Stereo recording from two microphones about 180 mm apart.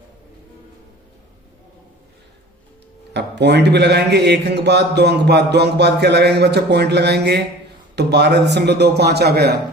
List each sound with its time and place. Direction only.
3.1 s a man's voice: 70° right (ahead or behind)